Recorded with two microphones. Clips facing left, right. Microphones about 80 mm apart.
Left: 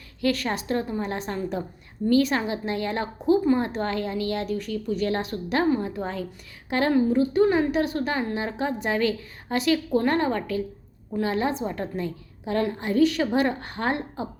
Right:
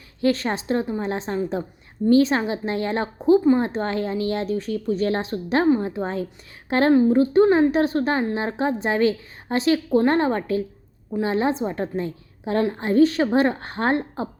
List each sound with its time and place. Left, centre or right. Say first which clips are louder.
0.2 s a woman's voice: right 3 dB; right